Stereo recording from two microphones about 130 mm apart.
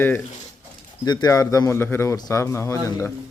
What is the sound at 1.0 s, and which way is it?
Speech, 30° left (ahead or behind).